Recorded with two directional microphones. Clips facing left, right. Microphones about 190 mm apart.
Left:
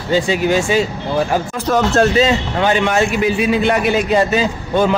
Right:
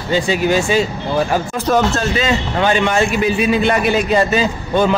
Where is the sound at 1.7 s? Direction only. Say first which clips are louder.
Right 1 dB; 15° right (ahead or behind).